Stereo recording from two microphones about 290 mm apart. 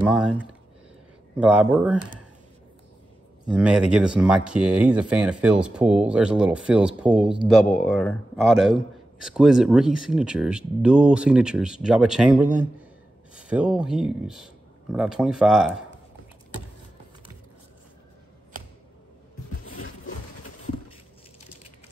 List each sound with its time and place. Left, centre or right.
0.1 s speech: centre
3.4 s speech: centre
19.6 s a sound: left